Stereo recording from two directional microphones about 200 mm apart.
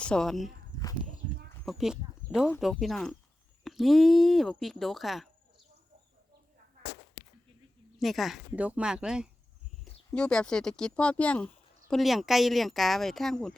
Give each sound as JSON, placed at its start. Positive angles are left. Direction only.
{"t": 0.0, "sound": "speech", "side_deg": 5}
{"t": 1.6, "sound": "speech", "side_deg": -5}
{"t": 7.9, "sound": "speech", "side_deg": 0}